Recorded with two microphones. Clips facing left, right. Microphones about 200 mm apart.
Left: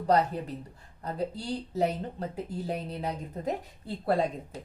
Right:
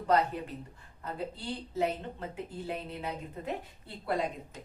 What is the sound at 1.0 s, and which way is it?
Speech, 40° left (ahead or behind).